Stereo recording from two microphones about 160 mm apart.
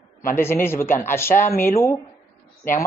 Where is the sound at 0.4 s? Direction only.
15° left (ahead or behind).